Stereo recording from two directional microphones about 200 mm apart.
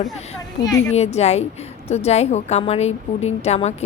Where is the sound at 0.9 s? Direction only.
30° left (ahead or behind).